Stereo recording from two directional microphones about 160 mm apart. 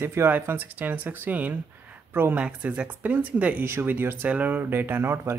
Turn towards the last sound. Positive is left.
turn(degrees=-15)  # may be behind; listen again after turning